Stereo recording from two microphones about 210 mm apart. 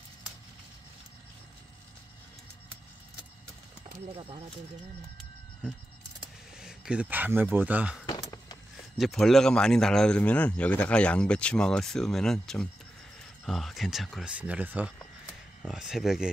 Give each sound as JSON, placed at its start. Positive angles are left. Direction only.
{"t": 4.1, "sound": "speech", "side_deg": -25}
{"t": 6.6, "sound": "speech", "side_deg": -5}
{"t": 8.1, "sound": "a sound", "side_deg": 20}
{"t": 8.9, "sound": "a man's voice", "side_deg": 0}